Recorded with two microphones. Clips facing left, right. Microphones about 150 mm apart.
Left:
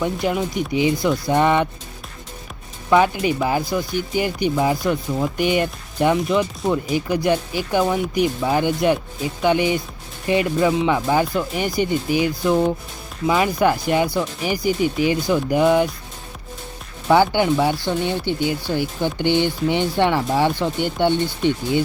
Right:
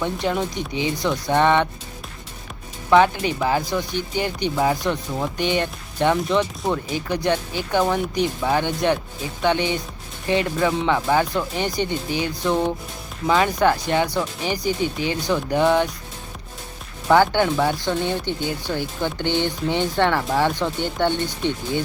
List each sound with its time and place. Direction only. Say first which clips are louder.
0.0 s speech: left 2 dB; 10° left (ahead or behind)
2.9 s speech: even; 10° left (ahead or behind)
17.1 s speech: left 1 dB; 15° left (ahead or behind)